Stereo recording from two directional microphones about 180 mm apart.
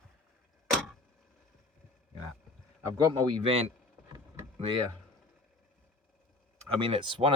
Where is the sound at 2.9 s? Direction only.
25° right (ahead or behind).